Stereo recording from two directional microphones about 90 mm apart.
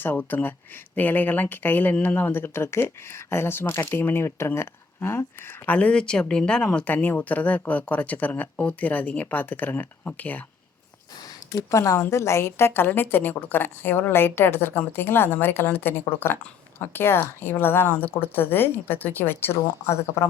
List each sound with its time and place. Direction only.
0.0 s a woman's voice: 20° left (ahead or behind)
5.6 s speech: 15° left (ahead or behind)
11.5 s a woman's voice: 35° left (ahead or behind)